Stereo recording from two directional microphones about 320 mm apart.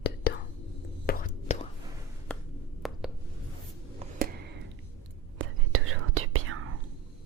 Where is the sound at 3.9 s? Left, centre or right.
Right.